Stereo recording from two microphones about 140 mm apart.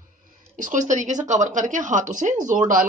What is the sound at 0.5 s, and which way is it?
A woman's voice, 65° right (ahead or behind).